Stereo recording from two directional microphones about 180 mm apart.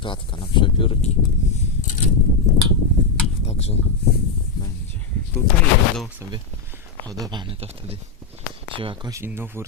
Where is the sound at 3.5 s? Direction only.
35° left (ahead or behind).